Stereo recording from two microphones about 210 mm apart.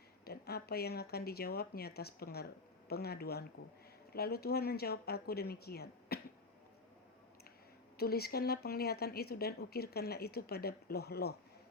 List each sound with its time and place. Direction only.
0.3 s speech: 50° left (ahead or behind)
7.9 s speech: 50° left (ahead or behind)